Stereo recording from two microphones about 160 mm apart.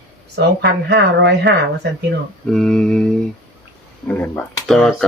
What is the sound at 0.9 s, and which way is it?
Speech, 90° right.